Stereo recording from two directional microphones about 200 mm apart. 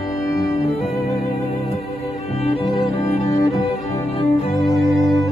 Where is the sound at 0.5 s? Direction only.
35° left (ahead or behind).